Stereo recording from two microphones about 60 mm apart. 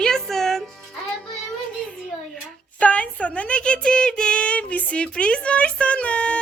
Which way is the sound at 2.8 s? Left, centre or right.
Left.